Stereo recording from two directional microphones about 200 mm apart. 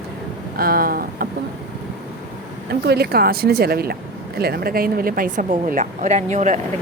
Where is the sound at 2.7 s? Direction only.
50° right (ahead or behind); by 6.6 s 35° right (ahead or behind).